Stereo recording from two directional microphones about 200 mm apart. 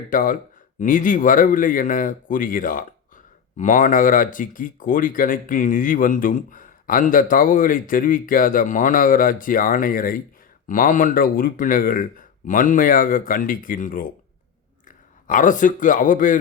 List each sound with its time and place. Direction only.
0.1 s a man's voice: 45° left (ahead or behind)